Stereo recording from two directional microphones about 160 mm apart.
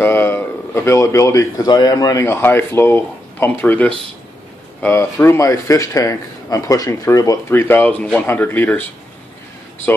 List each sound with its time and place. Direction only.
0.0 s a man's voice: 15° left (ahead or behind)